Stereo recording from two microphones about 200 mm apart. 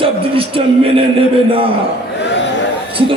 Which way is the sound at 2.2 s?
65° left (ahead or behind).